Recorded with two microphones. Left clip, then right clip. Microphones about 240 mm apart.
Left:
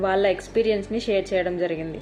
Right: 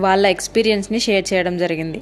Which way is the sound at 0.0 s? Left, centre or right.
Right.